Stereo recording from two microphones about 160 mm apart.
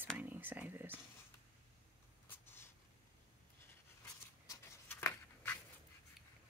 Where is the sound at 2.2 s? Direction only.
15° left (ahead or behind).